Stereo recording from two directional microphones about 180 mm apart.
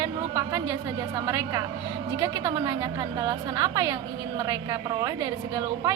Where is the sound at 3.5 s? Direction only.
20° right (ahead or behind).